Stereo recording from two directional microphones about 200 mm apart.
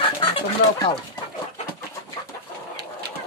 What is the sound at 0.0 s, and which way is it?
Chicken, 25° left (ahead or behind).